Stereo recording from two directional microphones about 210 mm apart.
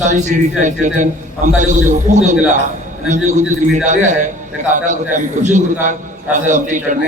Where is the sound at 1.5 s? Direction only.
35° right (ahead or behind).